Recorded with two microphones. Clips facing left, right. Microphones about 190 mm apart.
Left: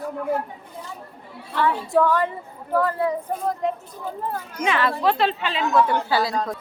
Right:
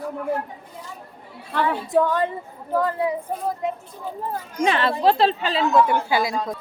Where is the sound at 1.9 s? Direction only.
20° right (ahead or behind).